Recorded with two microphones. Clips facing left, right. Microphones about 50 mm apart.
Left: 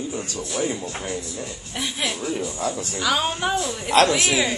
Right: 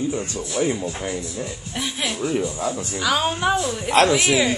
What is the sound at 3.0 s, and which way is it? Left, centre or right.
Speech, centre.